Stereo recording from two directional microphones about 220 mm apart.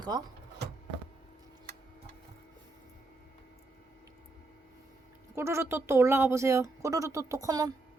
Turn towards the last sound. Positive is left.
turn(degrees=-15)  # may be behind; listen again after turning